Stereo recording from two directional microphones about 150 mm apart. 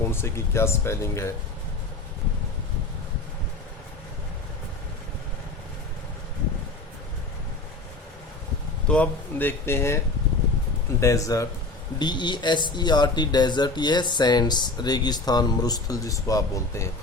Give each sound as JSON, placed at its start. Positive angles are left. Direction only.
{"t": 0.1, "sound": "speech", "side_deg": 15}
{"t": 8.9, "sound": "speech", "side_deg": 10}
{"t": 11.0, "sound": "speech", "side_deg": 20}